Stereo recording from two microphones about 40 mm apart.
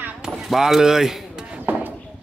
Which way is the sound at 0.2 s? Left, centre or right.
Centre.